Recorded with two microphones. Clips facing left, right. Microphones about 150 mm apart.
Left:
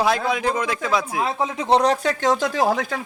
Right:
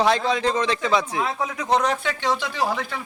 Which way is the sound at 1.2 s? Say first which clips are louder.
Left 3 dB; 25° left (ahead or behind).